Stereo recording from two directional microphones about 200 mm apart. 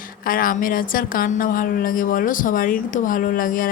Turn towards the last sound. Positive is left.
turn(degrees=45)  # may be behind; listen again after turning